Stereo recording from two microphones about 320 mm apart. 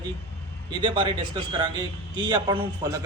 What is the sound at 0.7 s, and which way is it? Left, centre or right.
A man's voice, centre.